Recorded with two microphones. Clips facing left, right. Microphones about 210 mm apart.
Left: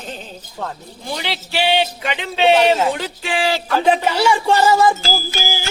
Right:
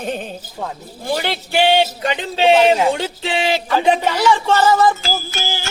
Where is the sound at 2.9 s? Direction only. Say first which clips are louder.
Right 2 dB; 25° right (ahead or behind).